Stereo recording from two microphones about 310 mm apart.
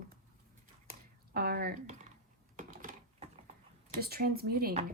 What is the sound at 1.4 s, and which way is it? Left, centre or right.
Speech, right.